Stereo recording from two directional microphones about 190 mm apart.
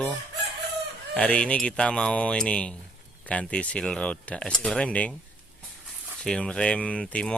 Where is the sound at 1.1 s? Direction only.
5° left (ahead or behind).